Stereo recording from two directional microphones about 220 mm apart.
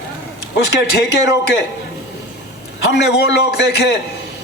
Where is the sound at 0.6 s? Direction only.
50° left (ahead or behind).